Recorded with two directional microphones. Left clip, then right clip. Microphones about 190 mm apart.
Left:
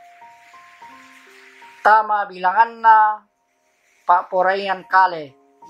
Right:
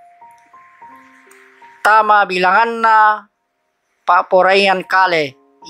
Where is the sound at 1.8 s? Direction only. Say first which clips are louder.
Right 4 dB; 30° right (ahead or behind).